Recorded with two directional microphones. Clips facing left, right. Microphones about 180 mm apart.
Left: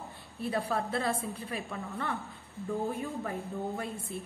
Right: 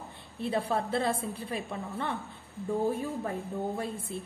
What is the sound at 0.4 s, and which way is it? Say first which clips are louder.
A woman's voice: right 2 dB; 30° right (ahead or behind).